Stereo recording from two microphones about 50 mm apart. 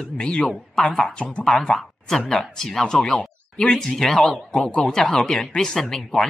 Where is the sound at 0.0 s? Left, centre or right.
Centre.